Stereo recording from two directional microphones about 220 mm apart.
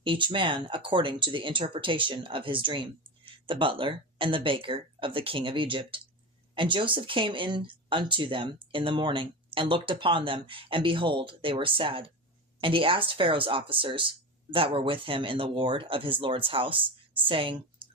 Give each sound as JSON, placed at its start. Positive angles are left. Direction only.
{"t": 0.0, "sound": "speech", "side_deg": -20}